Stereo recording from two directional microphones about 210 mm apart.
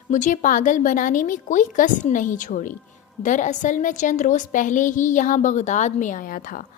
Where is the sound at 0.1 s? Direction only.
35° left (ahead or behind).